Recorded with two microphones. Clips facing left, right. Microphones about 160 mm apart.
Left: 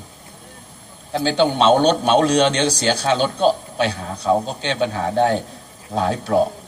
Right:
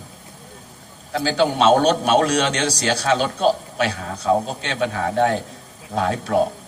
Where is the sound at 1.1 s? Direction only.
30° left (ahead or behind).